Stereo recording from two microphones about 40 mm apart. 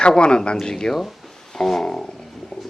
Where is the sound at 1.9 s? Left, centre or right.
Left.